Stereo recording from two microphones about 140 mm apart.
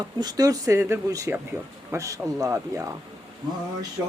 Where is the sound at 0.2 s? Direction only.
30° right (ahead or behind).